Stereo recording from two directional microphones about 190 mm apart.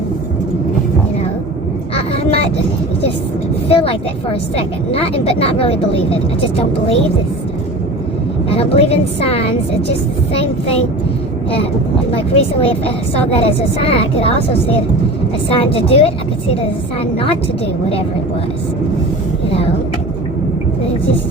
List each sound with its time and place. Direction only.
2.0 s a sound: 30° left (ahead or behind)
3.7 s a woman's voice: 30° left (ahead or behind)
8.4 s a woman's voice: 30° left (ahead or behind)
12.1 s a woman's voice: 30° left (ahead or behind)